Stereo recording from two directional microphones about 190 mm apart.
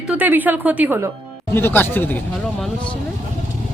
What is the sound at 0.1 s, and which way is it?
Speech, 10° right (ahead or behind).